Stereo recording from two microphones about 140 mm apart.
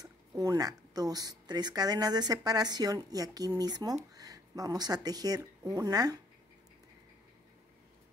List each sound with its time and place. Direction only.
0.0 s a woman's voice: 25° right (ahead or behind)